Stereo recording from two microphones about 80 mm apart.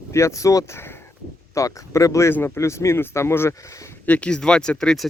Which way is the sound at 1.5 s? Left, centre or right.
Left.